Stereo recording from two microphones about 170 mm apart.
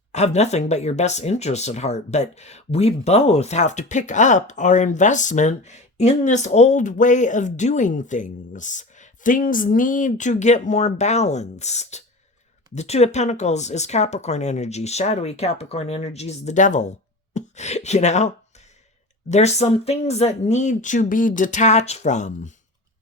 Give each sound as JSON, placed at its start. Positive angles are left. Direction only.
{"t": 0.1, "sound": "speech", "side_deg": 40}
{"t": 19.3, "sound": "speech", "side_deg": 40}